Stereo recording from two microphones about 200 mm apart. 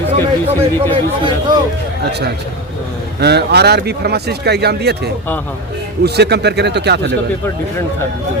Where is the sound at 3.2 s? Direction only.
55° right (ahead or behind).